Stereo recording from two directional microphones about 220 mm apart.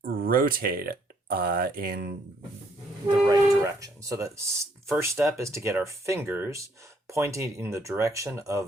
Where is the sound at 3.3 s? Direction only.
15° right (ahead or behind).